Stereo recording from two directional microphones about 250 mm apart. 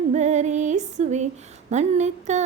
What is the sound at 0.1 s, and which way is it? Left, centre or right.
Music, right.